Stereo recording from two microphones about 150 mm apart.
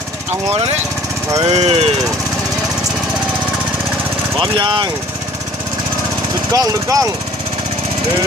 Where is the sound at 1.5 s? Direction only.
40° right (ahead or behind).